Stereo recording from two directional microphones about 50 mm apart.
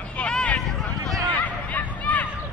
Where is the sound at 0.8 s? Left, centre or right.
Centre.